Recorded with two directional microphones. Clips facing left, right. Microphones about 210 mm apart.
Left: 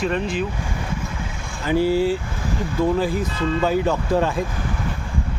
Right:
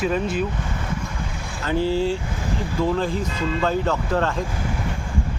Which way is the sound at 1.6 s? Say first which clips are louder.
Left 3 dB; 10° left (ahead or behind).